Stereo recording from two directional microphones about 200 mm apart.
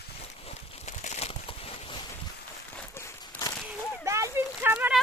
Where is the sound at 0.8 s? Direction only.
35° left (ahead or behind).